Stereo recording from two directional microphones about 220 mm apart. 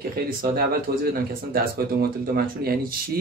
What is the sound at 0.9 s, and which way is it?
Speech, 45° right (ahead or behind).